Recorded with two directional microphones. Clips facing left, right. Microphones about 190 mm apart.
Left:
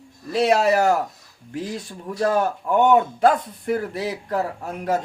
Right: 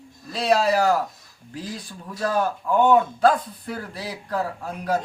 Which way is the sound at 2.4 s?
20° left (ahead or behind).